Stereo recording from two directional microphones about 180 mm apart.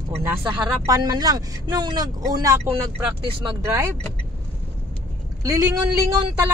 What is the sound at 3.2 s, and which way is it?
Speech, 30° right (ahead or behind).